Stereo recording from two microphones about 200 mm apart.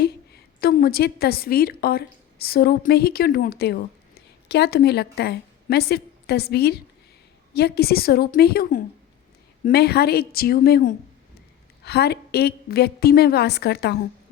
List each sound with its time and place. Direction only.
0.6 s a woman's voice: 50° left (ahead or behind)